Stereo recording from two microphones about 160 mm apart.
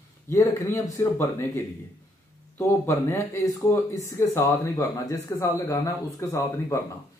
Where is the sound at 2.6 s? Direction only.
20° left (ahead or behind).